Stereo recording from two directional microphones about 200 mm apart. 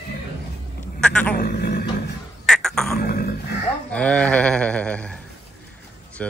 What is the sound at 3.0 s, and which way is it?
Dog, 50° left (ahead or behind).